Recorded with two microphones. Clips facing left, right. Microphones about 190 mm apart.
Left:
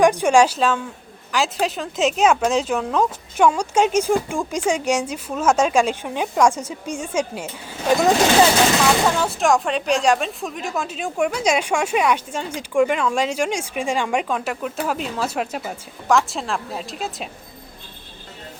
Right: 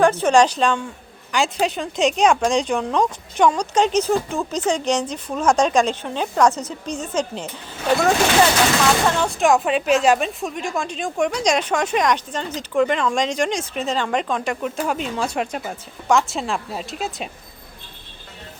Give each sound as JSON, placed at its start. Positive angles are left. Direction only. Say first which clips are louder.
{"t": 0.0, "sound": "speech", "louder": "even", "side_deg": 15}
{"t": 8.8, "sound": "speech", "louder": "even", "side_deg": 5}